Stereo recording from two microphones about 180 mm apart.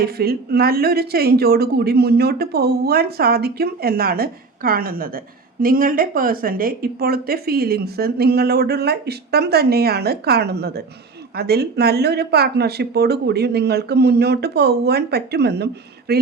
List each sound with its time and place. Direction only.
0.0 s a woman's voice: 60° right (ahead or behind)